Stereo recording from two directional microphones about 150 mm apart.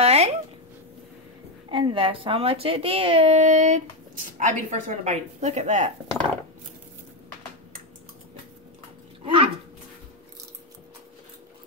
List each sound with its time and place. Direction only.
0.0 s a sound: 45° right (ahead or behind)
1.7 s speech: 35° right (ahead or behind); by 5.9 s 50° right (ahead or behind)
9.2 s speech: 35° right (ahead or behind)